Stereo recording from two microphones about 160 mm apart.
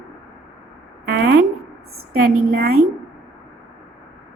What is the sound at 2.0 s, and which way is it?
Speech, 65° right (ahead or behind).